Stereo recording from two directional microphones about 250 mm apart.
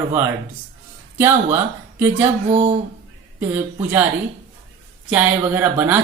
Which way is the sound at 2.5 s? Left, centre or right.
Right.